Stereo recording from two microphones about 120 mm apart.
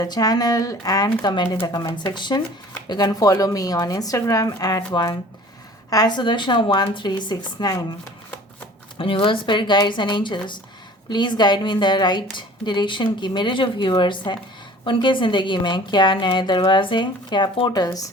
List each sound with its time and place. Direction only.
0.0 s a woman's voice: 30° left (ahead or behind)
9.0 s a woman's voice: 45° left (ahead or behind); by 18.1 s 30° left (ahead or behind)